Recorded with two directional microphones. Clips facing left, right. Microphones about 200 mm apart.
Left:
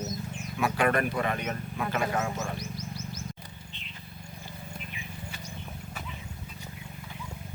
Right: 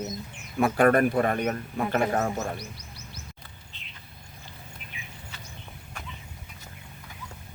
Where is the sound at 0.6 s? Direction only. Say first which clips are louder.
Right 6 dB; 50° right (ahead or behind).